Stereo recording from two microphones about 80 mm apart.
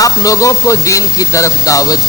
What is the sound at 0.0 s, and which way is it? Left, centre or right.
Speech, left.